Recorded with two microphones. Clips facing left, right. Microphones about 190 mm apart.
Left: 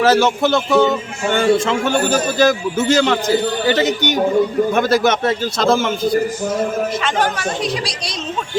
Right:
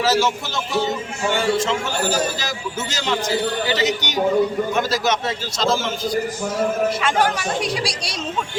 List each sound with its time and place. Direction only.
0.0 s a man's voice: 55° left (ahead or behind)
7.0 s a woman's voice: 10° right (ahead or behind)